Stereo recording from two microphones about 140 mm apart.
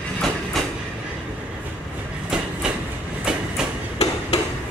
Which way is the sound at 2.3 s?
5° right (ahead or behind).